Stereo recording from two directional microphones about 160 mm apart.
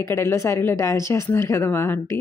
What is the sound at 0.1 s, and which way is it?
Speech, 15° left (ahead or behind).